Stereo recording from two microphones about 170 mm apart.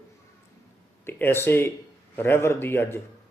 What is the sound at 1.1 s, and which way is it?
Speech, 10° left (ahead or behind).